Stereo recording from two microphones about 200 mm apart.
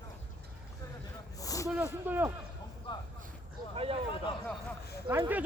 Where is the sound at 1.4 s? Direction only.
15° left (ahead or behind).